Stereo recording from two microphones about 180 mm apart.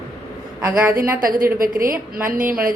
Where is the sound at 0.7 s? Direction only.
10° right (ahead or behind).